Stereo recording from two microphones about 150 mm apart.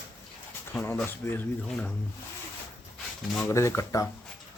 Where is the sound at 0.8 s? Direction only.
15° left (ahead or behind).